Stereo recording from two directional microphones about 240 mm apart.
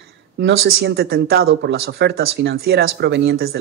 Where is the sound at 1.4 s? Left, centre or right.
Right.